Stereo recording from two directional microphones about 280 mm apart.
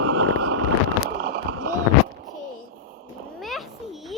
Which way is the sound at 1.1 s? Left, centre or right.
Right.